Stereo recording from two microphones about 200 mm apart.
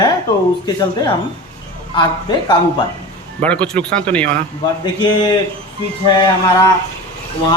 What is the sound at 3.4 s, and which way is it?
Speech, 5° left (ahead or behind).